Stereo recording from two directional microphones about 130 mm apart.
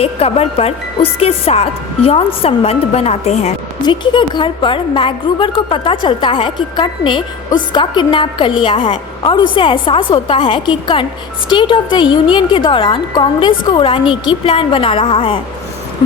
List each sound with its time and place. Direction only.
0.0 s speech: 50° left (ahead or behind)
3.8 s a woman's voice: 40° left (ahead or behind)